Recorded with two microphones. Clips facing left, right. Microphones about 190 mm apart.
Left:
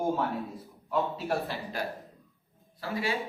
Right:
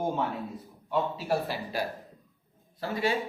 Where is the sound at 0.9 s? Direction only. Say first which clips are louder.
Right 1 dB; 5° right (ahead or behind).